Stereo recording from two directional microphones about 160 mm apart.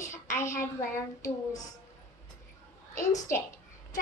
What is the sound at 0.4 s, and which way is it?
A woman's voice, 15° left (ahead or behind).